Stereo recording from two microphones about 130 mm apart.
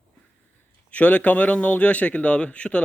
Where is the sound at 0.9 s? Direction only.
10° left (ahead or behind).